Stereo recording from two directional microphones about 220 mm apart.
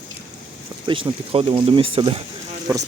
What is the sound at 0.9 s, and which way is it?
Speech, 25° right (ahead or behind).